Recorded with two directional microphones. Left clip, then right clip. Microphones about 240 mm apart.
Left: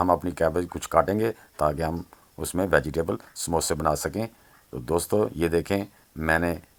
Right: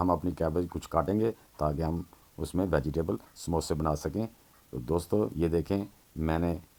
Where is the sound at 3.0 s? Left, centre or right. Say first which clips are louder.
Left 5 dB; left.